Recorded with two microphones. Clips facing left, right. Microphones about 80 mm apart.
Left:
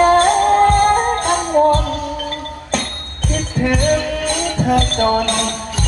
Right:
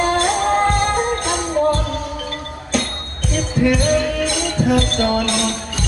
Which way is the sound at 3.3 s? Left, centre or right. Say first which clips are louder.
Right 2 dB; left.